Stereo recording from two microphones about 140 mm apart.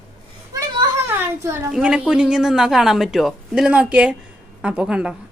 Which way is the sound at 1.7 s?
5° right (ahead or behind).